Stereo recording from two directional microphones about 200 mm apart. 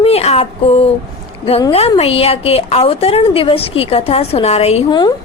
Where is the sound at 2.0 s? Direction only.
30° left (ahead or behind).